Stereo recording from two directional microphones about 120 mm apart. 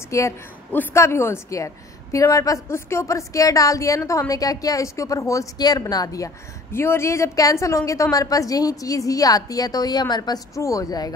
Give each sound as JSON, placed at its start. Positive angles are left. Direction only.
{"t": 0.1, "sound": "a woman's voice", "side_deg": 25}